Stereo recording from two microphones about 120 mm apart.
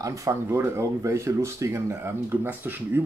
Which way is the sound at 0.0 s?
25° right (ahead or behind).